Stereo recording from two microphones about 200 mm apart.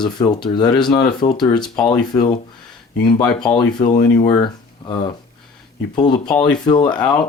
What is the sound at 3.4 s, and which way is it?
Speech, 20° left (ahead or behind).